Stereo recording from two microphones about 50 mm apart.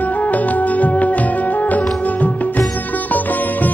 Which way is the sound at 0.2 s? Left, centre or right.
Left.